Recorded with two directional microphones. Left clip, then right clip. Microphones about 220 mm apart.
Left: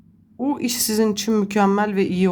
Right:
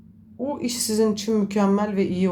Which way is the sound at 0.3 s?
30° left (ahead or behind).